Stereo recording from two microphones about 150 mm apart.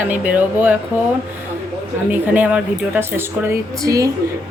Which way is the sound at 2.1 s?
10° right (ahead or behind).